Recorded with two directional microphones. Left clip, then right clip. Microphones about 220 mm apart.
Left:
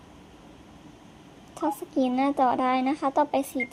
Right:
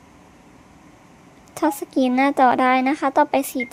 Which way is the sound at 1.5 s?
20° right (ahead or behind).